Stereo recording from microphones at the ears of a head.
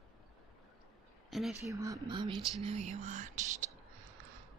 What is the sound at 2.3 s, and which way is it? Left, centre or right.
Speech, right.